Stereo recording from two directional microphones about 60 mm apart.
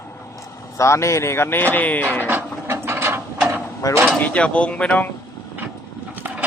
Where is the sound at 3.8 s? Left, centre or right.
Left.